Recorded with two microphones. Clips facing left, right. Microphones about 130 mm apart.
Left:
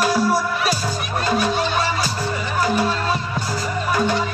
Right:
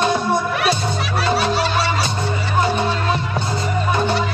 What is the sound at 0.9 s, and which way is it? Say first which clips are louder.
Music: right 2 dB; 80° right.